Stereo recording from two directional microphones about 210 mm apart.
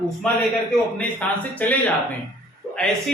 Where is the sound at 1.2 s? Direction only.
5° left (ahead or behind).